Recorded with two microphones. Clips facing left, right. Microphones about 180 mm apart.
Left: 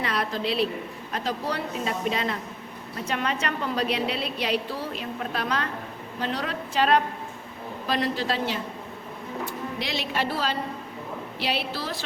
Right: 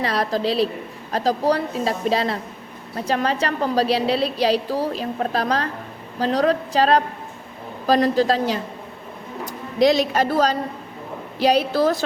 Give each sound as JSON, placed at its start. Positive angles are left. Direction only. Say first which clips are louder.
{"t": 0.0, "sound": "a woman's voice", "louder": "right 6 dB", "side_deg": -35}